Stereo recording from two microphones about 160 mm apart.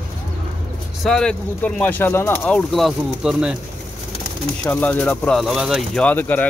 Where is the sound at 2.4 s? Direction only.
5° left (ahead or behind).